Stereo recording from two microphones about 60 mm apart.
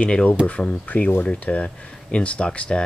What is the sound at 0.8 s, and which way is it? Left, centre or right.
Speech, left.